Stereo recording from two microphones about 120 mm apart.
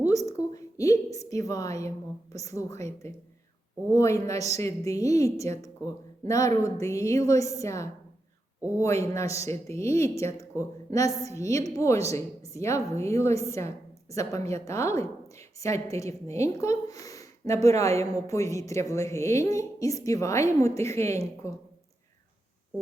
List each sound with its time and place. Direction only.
0.3 s a woman's voice: 25° left (ahead or behind)